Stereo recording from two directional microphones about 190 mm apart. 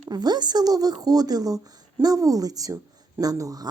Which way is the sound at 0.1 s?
20° right (ahead or behind).